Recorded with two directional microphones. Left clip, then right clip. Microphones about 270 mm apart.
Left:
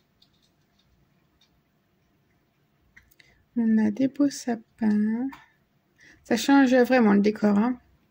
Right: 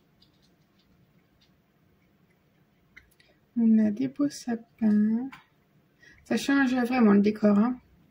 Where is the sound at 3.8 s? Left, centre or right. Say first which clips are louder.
Left 3 dB; left.